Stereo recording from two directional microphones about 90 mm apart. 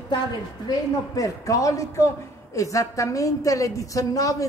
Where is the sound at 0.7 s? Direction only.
35° left (ahead or behind).